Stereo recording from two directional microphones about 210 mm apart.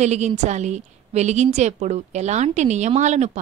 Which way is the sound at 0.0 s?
35° right (ahead or behind).